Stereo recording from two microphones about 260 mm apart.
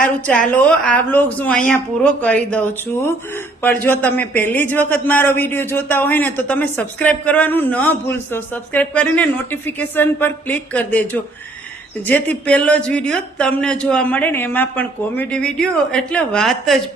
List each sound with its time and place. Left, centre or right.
0.0 s a man's voice: centre